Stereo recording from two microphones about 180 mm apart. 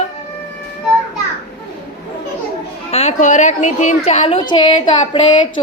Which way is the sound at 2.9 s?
35° left (ahead or behind).